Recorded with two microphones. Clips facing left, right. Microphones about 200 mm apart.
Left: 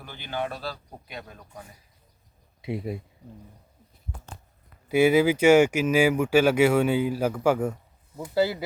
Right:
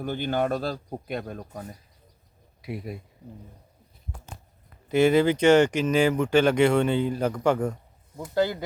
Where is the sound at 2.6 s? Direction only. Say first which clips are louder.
Left 4 dB; 25° left (ahead or behind).